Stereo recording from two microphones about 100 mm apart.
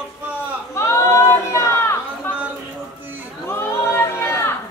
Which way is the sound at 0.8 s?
30° left (ahead or behind).